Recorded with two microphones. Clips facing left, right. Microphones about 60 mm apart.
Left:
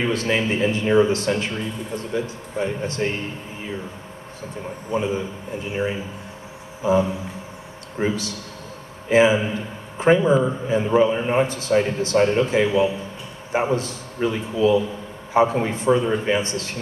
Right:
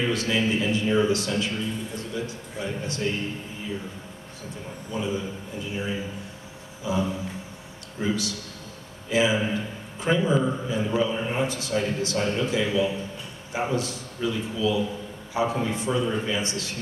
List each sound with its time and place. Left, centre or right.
0.0 s a man's voice: left
4.9 s a man's voice: left
6.8 s a sound: left
8.0 s a man's voice: left